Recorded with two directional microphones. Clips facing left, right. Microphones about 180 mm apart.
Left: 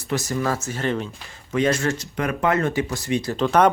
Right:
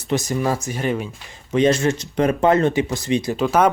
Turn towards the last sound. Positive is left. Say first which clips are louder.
# even
turn(degrees=-5)  # may be behind; listen again after turning